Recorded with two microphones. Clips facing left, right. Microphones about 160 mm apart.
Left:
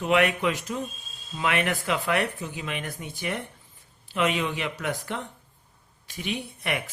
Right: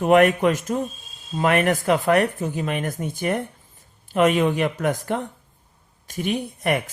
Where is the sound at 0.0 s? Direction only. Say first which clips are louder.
Right 7 dB; 45° right (ahead or behind).